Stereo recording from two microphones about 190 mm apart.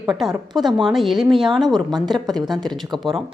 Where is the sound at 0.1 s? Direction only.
Centre (ahead or behind).